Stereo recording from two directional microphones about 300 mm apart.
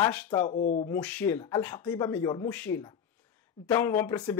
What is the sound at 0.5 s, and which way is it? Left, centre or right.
Speech, left.